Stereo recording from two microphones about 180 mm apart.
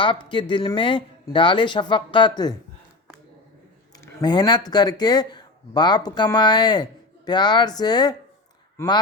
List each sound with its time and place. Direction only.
0.0 s speech: 25° left (ahead or behind)
4.0 s speech: 25° left (ahead or behind)